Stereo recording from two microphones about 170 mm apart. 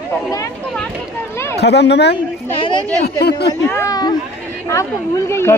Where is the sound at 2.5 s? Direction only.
30° left (ahead or behind).